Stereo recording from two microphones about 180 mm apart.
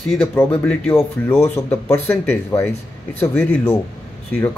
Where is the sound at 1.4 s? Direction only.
35° left (ahead or behind).